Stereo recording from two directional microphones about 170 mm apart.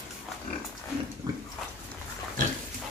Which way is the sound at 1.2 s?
20° right (ahead or behind).